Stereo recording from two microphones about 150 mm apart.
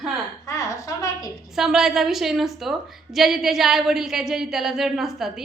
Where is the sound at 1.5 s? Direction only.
Centre (ahead or behind).